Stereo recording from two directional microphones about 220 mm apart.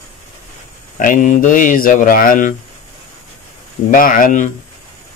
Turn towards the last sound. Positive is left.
turn(degrees=35)  # may be behind; listen again after turning